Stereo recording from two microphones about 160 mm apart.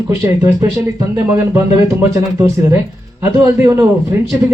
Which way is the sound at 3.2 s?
15° right (ahead or behind).